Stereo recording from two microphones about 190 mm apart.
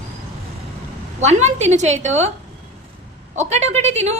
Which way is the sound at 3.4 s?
35° right (ahead or behind).